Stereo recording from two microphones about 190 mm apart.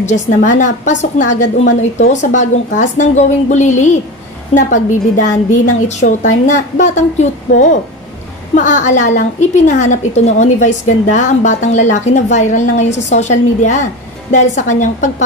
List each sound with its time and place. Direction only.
0.0 s a woman's voice: 40° left (ahead or behind)